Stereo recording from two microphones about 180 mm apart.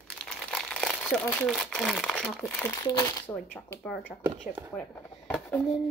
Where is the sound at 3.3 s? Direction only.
Centre (ahead or behind).